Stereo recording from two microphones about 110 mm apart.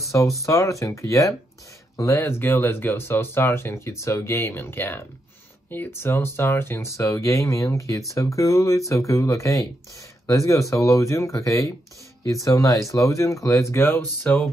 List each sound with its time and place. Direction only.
0.0 s speech: 30° left (ahead or behind)